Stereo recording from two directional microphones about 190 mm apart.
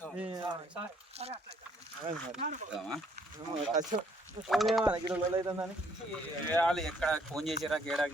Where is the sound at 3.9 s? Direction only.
30° right (ahead or behind).